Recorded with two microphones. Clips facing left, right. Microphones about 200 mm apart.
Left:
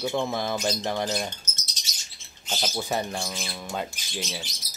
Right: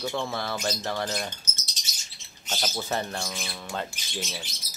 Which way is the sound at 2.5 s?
10° left (ahead or behind).